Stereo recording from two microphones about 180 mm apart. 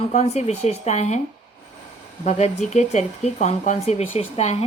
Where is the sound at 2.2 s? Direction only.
40° left (ahead or behind).